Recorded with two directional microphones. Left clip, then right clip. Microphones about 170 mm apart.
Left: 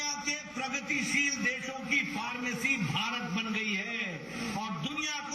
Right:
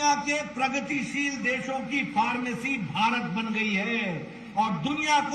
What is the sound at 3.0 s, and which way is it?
Speech, centre (ahead or behind).